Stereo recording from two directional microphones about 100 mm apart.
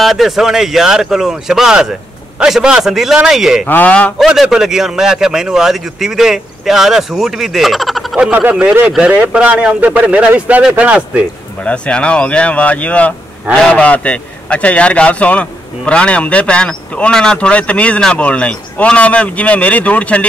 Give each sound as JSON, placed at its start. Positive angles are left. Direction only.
{"t": 0.0, "sound": "a man's voice", "side_deg": 0}
{"t": 3.6, "sound": "speech", "side_deg": 15}
{"t": 4.3, "sound": "a man's voice", "side_deg": -5}
{"t": 8.3, "sound": "speech", "side_deg": -15}
{"t": 11.6, "sound": "speech", "side_deg": 10}